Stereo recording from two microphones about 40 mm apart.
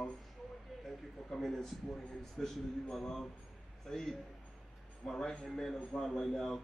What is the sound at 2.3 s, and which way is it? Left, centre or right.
Speech, centre.